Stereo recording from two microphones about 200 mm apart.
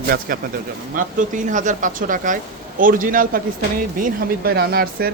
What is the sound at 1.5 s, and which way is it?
A man's voice, 40° right (ahead or behind).